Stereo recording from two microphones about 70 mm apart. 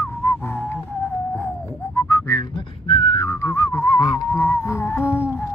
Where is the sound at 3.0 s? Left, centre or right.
Left.